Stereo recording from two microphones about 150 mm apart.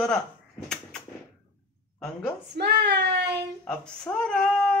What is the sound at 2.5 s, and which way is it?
Speech, 90° right.